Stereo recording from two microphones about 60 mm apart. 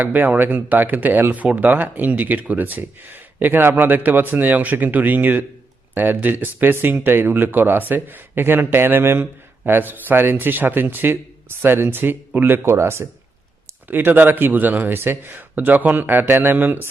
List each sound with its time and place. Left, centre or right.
0.0 s speech: right
13.8 s speech: right